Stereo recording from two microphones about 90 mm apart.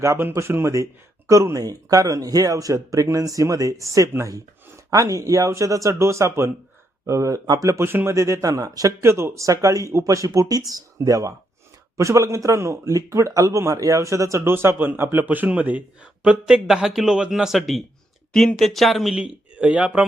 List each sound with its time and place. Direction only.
0.0 s speech: 35° right (ahead or behind)
7.9 s a man's voice: 25° right (ahead or behind); by 19.1 s centre (ahead or behind)
19.1 s speech: 10° right (ahead or behind)